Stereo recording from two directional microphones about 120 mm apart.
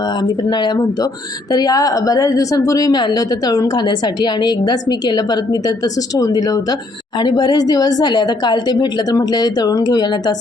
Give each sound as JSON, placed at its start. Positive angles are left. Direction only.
{"t": 0.2, "sound": "a woman's voice", "side_deg": 35}